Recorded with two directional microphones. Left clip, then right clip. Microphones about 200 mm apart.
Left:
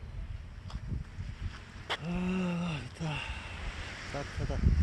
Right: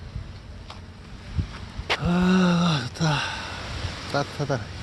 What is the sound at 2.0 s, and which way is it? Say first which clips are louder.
Gasp: right 13 dB; 30° right (ahead or behind).